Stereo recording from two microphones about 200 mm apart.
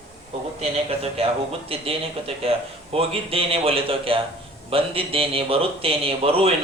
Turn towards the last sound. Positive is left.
turn(degrees=-30)  # may be behind; listen again after turning